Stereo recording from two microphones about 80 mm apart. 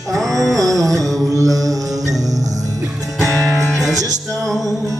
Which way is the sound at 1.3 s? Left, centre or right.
Right.